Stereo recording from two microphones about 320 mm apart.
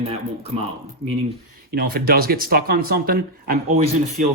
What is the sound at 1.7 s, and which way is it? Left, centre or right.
Speech, right.